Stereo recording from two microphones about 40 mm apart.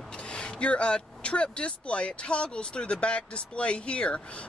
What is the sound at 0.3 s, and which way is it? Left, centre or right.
Speech, left.